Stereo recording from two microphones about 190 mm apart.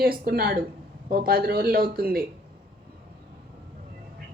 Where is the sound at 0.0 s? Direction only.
50° right (ahead or behind).